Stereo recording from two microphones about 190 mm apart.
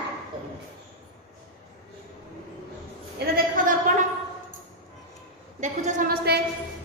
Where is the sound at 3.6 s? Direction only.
40° right (ahead or behind).